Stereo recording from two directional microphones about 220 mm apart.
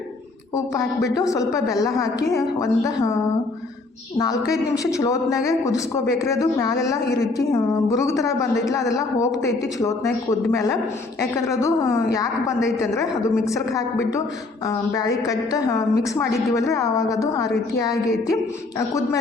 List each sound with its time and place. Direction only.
1.1 s a woman's voice: 15° left (ahead or behind)
4.2 s a woman's voice: 15° left (ahead or behind)